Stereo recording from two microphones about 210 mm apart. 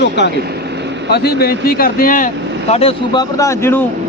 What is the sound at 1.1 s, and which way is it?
Speech, 50° left (ahead or behind).